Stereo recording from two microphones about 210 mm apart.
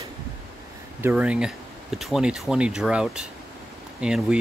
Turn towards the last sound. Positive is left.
turn(degrees=-5)  # may be behind; listen again after turning